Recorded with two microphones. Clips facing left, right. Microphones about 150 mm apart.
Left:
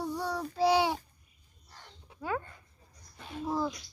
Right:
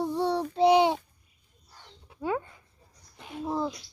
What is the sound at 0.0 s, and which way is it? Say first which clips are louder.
Child singing: right 7 dB; 25° right (ahead or behind).